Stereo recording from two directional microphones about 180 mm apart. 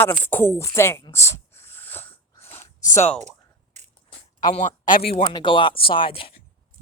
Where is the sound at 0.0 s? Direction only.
10° left (ahead or behind).